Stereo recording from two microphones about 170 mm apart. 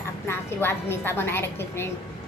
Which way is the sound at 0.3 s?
15° left (ahead or behind).